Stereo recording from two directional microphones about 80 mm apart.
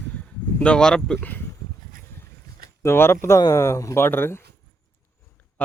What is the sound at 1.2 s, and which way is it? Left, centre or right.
Speech, left.